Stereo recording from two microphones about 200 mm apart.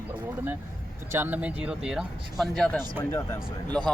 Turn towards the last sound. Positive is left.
turn(degrees=0)  # may be behind; listen again after turning